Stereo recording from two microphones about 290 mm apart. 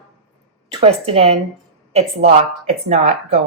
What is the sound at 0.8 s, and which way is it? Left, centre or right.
A woman's voice, centre.